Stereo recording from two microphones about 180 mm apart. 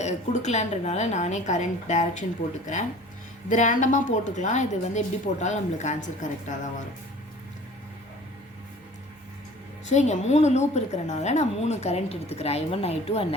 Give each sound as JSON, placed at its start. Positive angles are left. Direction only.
{"t": 0.0, "sound": "a woman's voice", "side_deg": 40}
{"t": 3.5, "sound": "a woman's voice", "side_deg": 45}
{"t": 9.9, "sound": "a woman's voice", "side_deg": 40}